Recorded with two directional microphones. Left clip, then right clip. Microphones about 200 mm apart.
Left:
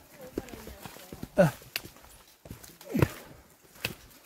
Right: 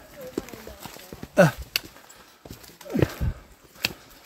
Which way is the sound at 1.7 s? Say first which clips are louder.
Right 9 dB; 50° right (ahead or behind).